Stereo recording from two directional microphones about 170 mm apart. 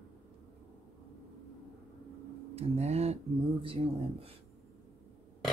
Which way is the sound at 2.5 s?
40° right (ahead or behind).